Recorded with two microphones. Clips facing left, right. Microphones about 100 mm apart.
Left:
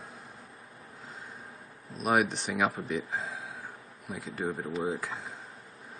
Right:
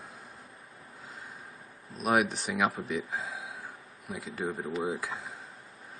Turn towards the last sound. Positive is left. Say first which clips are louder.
# even
turn(degrees=0)  # may be behind; listen again after turning